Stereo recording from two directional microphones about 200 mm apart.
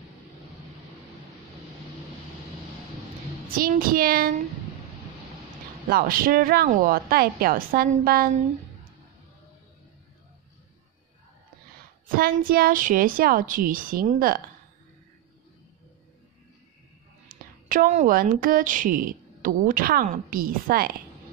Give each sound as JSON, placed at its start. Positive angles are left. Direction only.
{"t": 3.4, "sound": "a woman's voice", "side_deg": -45}
{"t": 5.9, "sound": "a woman's voice", "side_deg": -45}
{"t": 12.2, "sound": "a woman's voice", "side_deg": -45}
{"t": 17.3, "sound": "speech", "side_deg": -45}